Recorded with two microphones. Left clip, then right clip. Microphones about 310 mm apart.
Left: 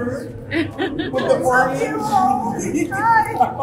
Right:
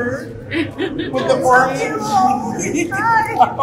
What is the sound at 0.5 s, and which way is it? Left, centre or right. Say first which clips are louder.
A woman's voice: right 1 dB; centre.